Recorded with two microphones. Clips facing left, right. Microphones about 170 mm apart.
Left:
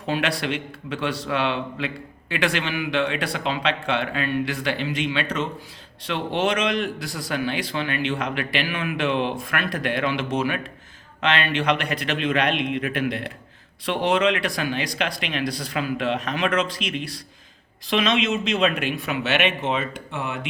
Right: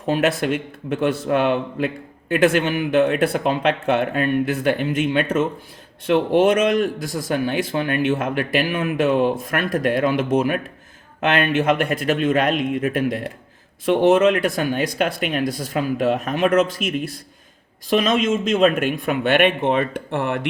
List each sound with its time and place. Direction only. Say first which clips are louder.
0.1 s speech: right 5 dB; 45° right (ahead or behind)